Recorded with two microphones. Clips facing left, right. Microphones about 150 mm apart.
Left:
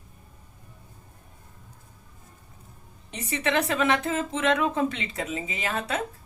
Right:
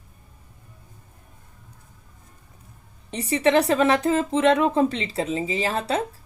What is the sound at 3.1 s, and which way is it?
Speech, 35° right (ahead or behind).